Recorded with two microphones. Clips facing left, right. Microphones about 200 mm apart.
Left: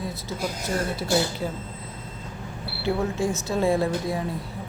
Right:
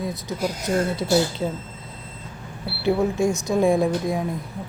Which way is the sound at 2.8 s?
15° right (ahead or behind).